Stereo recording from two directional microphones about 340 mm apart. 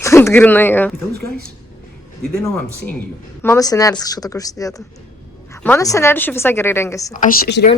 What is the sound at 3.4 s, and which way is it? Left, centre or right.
A woman's voice, centre.